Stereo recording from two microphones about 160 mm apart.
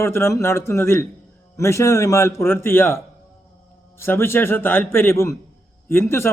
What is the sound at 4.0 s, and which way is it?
A man's voice, 15° left (ahead or behind).